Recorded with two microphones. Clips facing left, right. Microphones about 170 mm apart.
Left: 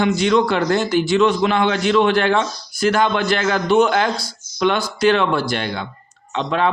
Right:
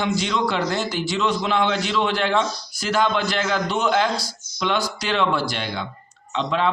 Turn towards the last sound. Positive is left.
turn(degrees=55)  # may be behind; listen again after turning